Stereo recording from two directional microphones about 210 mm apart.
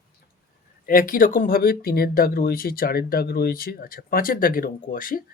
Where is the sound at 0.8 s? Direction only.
40° left (ahead or behind).